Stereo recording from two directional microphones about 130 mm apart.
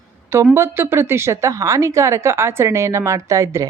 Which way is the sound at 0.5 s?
20° right (ahead or behind).